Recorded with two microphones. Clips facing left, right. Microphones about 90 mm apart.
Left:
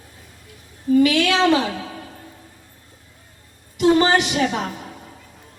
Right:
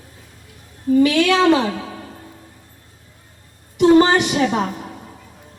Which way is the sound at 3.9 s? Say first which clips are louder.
Right 5 dB; 35° right (ahead or behind).